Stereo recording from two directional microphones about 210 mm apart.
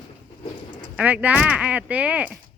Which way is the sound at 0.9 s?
5° right (ahead or behind).